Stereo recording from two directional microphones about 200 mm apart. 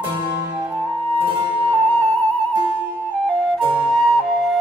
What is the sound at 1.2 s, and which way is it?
Music, 25° right (ahead or behind).